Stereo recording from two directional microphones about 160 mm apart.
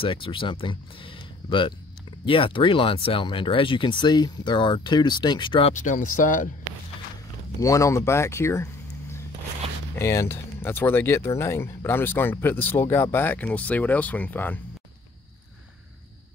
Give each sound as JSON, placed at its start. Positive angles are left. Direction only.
{"t": 0.0, "sound": "speech", "side_deg": 35}
{"t": 5.7, "sound": "speech", "side_deg": 55}
{"t": 7.6, "sound": "speech", "side_deg": 20}
{"t": 9.9, "sound": "speech", "side_deg": 15}